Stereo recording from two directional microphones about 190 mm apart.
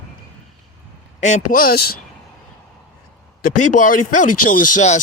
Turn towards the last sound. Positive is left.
turn(degrees=40)  # may be behind; listen again after turning